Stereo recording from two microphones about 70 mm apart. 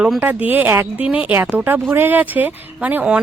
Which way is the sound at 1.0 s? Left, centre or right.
Centre.